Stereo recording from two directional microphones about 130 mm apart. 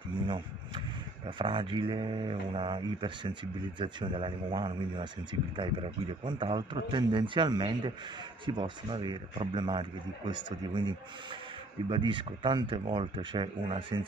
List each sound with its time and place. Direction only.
1.4 s speech: 40° right (ahead or behind)